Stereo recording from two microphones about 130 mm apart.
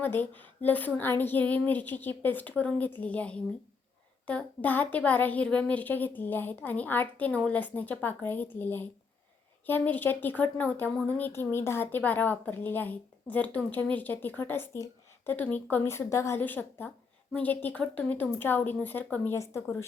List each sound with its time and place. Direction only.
0.0 s a woman's voice: 15° left (ahead or behind)